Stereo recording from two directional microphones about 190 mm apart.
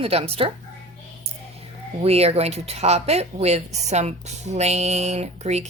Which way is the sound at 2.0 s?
35° right (ahead or behind).